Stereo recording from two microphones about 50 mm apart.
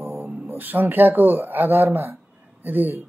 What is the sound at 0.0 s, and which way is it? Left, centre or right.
Speech, right.